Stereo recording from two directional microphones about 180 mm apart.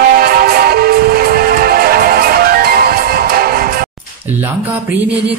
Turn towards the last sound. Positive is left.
turn(degrees=-55)  # may be behind; listen again after turning